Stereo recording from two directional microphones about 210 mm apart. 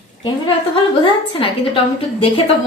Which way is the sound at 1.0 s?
25° left (ahead or behind).